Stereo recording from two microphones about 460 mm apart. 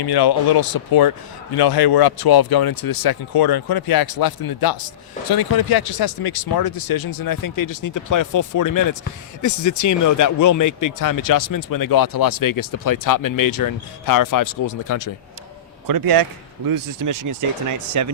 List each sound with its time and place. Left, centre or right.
0.0 s speech: left
15.9 s speech: right